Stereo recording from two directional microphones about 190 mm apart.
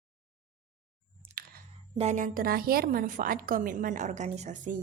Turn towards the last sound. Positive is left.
turn(degrees=-40)  # may be behind; listen again after turning